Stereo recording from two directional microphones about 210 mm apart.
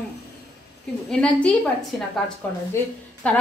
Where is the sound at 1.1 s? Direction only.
5° left (ahead or behind).